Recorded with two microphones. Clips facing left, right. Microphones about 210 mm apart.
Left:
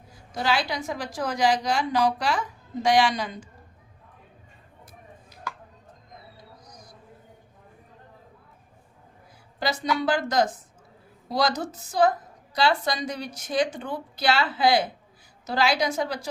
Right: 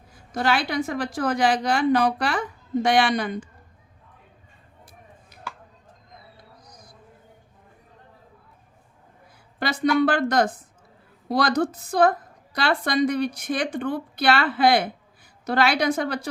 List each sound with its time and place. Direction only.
0.1 s a woman's voice: 55° right (ahead or behind)
9.6 s a woman's voice: 60° right (ahead or behind)